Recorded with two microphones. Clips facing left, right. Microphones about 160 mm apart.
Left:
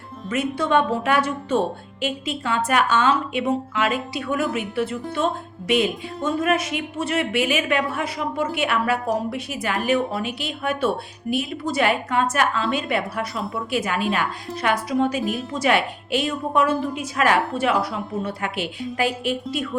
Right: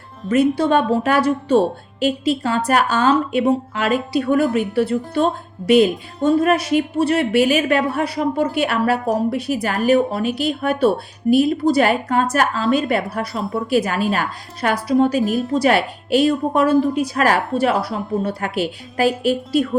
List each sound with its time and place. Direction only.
0.3 s speech: 35° right (ahead or behind)